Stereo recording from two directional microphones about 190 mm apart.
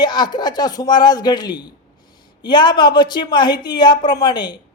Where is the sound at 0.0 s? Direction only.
20° left (ahead or behind).